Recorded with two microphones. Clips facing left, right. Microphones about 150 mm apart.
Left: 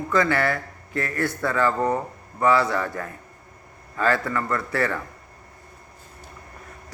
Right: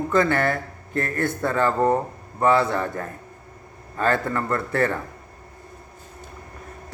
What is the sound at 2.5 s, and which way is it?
Speech, 55° right (ahead or behind).